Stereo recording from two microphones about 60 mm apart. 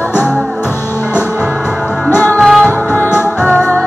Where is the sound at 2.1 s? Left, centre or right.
Left.